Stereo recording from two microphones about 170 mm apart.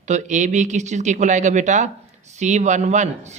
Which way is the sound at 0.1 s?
45° right (ahead or behind).